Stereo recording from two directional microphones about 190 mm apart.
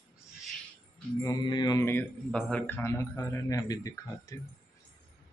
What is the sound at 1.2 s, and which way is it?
A man's voice, 20° left (ahead or behind).